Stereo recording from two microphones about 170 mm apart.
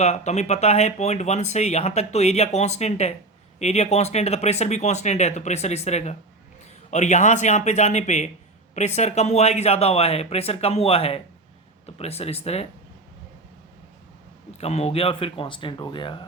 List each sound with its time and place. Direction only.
0.0 s speech: 40° left (ahead or behind)
14.6 s speech: 40° left (ahead or behind)